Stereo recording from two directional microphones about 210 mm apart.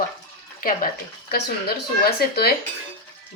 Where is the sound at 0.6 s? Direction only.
40° left (ahead or behind).